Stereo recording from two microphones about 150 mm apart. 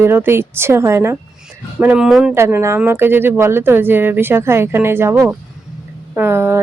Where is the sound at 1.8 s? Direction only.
5° right (ahead or behind).